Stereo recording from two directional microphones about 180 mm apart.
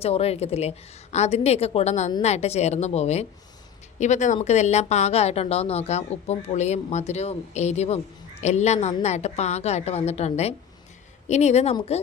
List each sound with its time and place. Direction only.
0.0 s speech: 35° left (ahead or behind)